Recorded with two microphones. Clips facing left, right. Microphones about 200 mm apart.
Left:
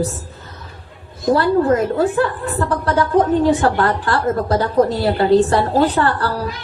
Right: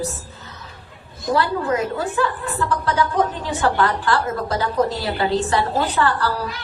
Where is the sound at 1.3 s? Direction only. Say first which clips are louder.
Left 5 dB; 50° left (ahead or behind).